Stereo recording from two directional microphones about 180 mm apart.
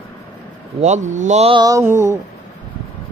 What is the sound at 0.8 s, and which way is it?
Speech, 40° right (ahead or behind).